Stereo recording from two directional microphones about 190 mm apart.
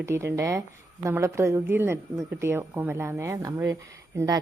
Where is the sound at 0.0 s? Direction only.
15° right (ahead or behind).